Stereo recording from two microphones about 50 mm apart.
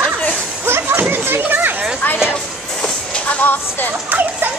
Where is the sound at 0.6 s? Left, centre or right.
Right.